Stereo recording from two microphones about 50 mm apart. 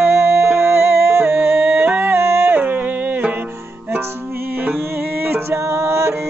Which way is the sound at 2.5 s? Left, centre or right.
Right.